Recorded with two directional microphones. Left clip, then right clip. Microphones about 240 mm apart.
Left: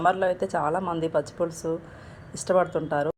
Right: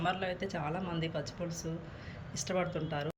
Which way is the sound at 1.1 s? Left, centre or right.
Left.